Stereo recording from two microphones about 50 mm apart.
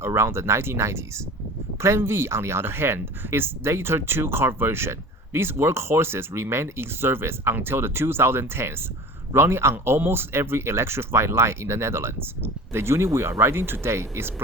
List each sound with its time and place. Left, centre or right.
0.0 s speech: right